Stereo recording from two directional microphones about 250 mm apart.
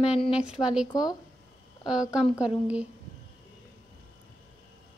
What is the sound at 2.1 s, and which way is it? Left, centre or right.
Speech, centre.